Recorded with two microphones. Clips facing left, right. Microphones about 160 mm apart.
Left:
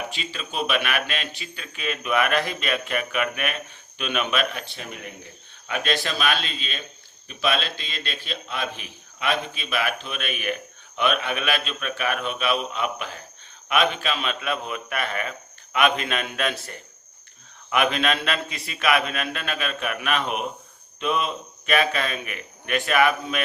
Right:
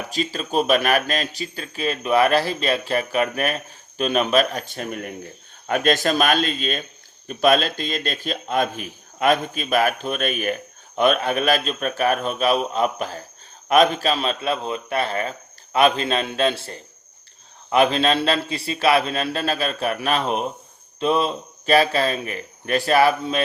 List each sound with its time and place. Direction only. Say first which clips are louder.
0.1 s a man's voice: right 9 dB; 40° right (ahead or behind)